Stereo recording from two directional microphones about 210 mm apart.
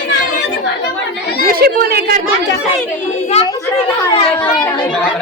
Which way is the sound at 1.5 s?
45° right (ahead or behind).